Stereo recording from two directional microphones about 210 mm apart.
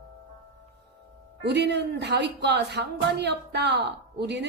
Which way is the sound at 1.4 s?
55° right (ahead or behind).